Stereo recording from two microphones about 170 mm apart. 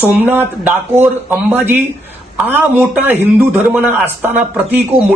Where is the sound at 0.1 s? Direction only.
10° right (ahead or behind).